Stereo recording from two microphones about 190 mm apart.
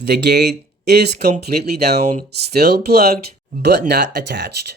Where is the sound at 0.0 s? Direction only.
60° right (ahead or behind).